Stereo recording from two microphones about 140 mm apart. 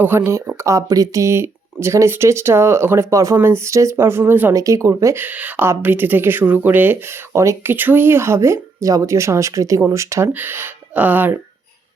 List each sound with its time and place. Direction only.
0.0 s speech: 15° right (ahead or behind)